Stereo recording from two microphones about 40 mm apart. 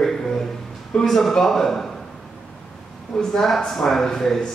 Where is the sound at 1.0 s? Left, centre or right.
Centre.